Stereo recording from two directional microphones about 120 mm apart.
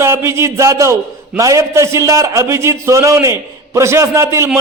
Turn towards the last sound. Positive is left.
turn(degrees=-25)  # may be behind; listen again after turning